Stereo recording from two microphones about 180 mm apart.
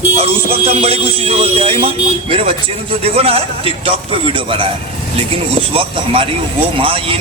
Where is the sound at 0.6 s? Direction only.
30° right (ahead or behind).